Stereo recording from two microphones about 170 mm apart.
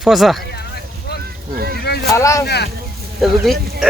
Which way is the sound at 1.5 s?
65° right (ahead or behind).